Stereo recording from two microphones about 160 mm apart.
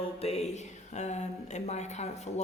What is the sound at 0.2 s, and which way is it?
Speech, 40° left (ahead or behind).